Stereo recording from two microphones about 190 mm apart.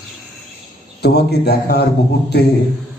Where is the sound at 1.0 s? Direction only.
60° left (ahead or behind).